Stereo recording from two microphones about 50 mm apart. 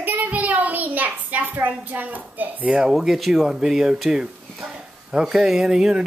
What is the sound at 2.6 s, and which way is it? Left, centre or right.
Speech, centre.